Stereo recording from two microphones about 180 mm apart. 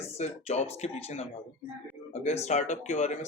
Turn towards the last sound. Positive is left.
turn(degrees=40)  # may be behind; listen again after turning